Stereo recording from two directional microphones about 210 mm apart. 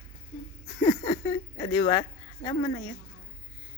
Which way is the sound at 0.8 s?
15° left (ahead or behind).